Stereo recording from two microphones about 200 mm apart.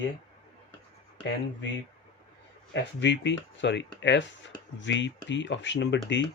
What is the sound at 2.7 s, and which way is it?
Speech, 65° left (ahead or behind).